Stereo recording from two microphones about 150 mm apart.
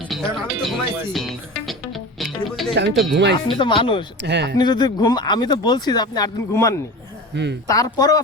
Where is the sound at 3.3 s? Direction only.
35° left (ahead or behind).